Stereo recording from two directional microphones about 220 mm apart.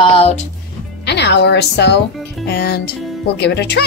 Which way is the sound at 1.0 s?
50° left (ahead or behind).